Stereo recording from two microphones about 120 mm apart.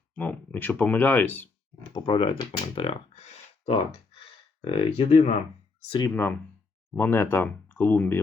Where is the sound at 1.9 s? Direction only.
45° left (ahead or behind).